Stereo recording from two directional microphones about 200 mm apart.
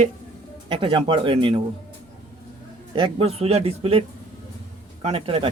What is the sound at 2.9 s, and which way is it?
Speech, 25° right (ahead or behind).